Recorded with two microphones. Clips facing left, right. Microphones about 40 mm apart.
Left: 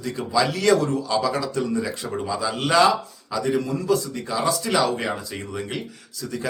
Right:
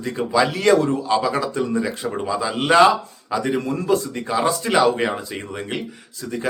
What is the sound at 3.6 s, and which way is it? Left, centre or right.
Speech, right.